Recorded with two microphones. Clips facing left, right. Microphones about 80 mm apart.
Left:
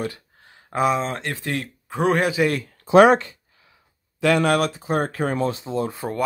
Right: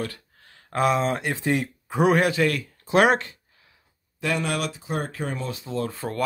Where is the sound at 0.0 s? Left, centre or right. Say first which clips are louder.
Left 3 dB; centre.